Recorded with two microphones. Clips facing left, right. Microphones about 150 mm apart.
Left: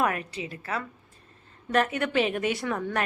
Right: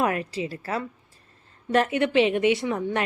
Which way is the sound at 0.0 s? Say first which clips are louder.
Right 3 dB; 30° right (ahead or behind).